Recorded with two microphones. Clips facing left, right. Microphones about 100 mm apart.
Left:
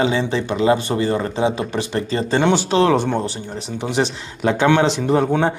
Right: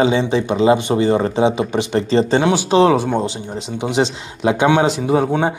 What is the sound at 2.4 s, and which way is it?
Speech, 10° right (ahead or behind).